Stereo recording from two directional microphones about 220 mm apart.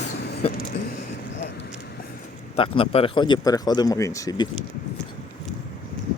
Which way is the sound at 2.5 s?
25° left (ahead or behind).